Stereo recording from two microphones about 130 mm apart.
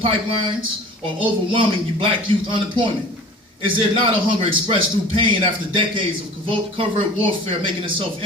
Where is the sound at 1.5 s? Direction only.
40° right (ahead or behind).